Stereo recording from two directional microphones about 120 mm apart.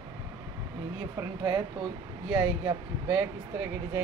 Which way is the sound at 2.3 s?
40° right (ahead or behind).